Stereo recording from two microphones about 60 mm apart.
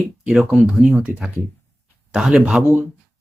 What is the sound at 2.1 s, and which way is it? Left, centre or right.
Speech, centre.